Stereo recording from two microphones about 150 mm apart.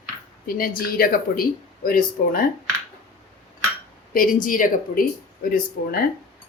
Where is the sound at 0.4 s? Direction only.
75° left (ahead or behind).